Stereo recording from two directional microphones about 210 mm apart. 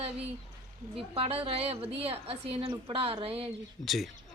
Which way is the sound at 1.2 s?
25° right (ahead or behind).